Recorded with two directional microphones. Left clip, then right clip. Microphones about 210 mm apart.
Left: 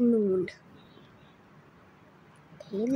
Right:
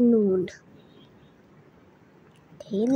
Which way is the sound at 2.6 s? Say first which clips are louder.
Right 5 dB; 5° right (ahead or behind).